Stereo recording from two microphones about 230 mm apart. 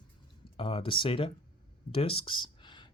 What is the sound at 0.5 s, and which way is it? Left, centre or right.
Speech, left.